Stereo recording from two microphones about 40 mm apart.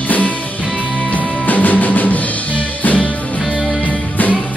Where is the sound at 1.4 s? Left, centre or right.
Left.